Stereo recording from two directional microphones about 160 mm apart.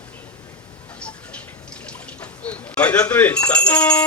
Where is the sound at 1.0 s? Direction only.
10° left (ahead or behind).